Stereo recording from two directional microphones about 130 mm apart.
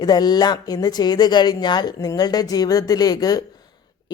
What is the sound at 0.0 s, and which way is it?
A woman's voice, 30° left (ahead or behind).